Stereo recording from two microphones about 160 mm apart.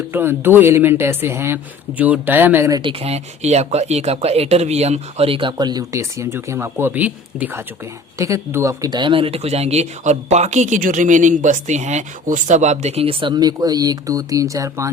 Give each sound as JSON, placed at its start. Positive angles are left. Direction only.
{"t": 0.1, "sound": "speech", "side_deg": -15}
{"t": 2.8, "sound": "speech", "side_deg": -40}